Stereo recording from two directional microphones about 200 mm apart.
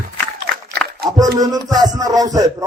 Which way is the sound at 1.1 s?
20° right (ahead or behind).